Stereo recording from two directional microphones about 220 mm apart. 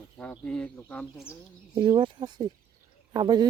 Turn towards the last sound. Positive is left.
turn(degrees=-20)  # may be behind; listen again after turning